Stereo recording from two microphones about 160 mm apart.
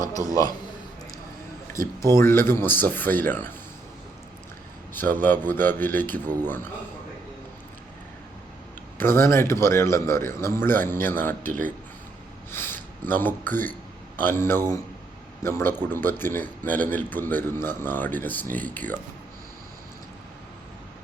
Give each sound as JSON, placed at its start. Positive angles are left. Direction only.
{"t": 0.3, "sound": "a man's voice", "side_deg": 25}
{"t": 2.1, "sound": "a man's voice", "side_deg": 15}
{"t": 4.9, "sound": "a man's voice", "side_deg": 10}
{"t": 9.0, "sound": "a man's voice", "side_deg": 15}